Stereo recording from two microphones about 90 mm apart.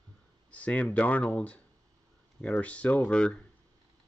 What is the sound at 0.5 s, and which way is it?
Speech, 15° left (ahead or behind).